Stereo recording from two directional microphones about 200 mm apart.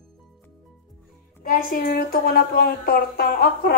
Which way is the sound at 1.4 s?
45° left (ahead or behind).